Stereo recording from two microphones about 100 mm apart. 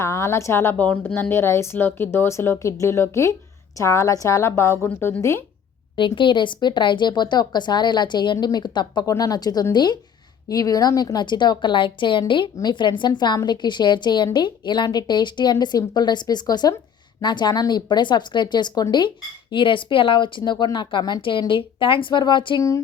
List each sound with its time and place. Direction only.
0.0 s a woman's voice: 30° left (ahead or behind)
6.1 s speech: 55° left (ahead or behind)
9.0 s a woman's voice: 35° left (ahead or behind); by 22.6 s 55° left (ahead or behind)